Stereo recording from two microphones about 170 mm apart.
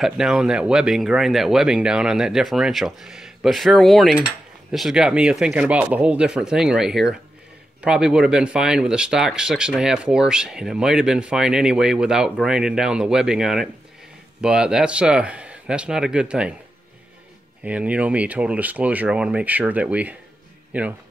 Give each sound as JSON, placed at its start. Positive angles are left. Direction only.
{"t": 0.0, "sound": "speech", "side_deg": -5}
{"t": 17.6, "sound": "speech", "side_deg": -10}